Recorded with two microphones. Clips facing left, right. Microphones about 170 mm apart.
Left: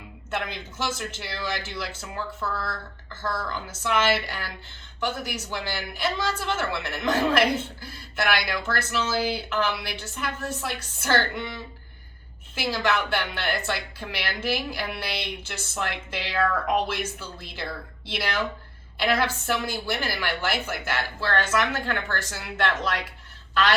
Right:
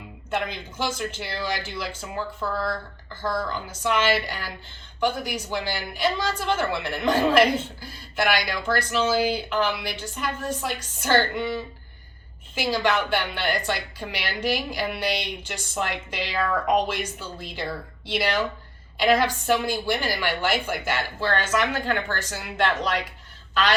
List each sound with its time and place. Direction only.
0.3 s a woman's voice: 15° right (ahead or behind)
12.5 s a woman's voice: 15° right (ahead or behind)